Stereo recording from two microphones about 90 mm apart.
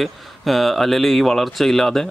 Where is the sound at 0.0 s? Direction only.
Centre (ahead or behind).